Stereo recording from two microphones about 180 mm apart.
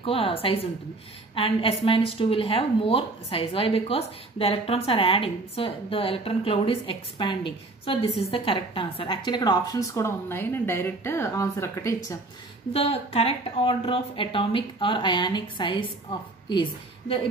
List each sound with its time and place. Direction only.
0.0 s a woman's voice: 30° left (ahead or behind); by 11.9 s 15° left (ahead or behind)
12.7 s a woman's voice: 35° left (ahead or behind)